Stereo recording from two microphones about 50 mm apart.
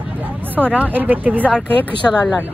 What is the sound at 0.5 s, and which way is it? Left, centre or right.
Speech, right.